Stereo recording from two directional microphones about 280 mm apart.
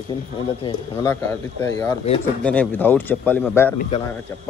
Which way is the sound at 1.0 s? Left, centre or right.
Centre.